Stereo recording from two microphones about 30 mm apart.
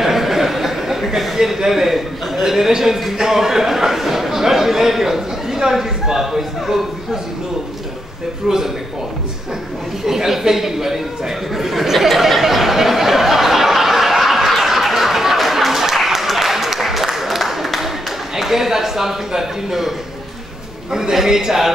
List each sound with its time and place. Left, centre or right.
0.0 s a sound: centre
1.7 s a man's voice: centre
8.5 s a man's voice: centre
10.0 s a man's voice: centre
11.5 s a sound: centre
18.3 s a man's voice: centre
20.9 s a man's voice: centre